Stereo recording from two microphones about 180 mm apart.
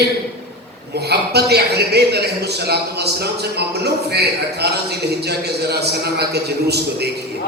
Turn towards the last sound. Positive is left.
turn(degrees=-65)  # may be behind; listen again after turning